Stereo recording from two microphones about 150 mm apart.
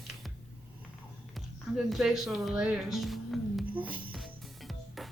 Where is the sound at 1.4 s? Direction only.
Centre (ahead or behind).